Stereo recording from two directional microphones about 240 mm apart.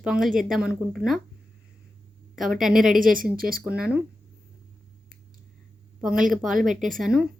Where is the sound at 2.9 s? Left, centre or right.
Right.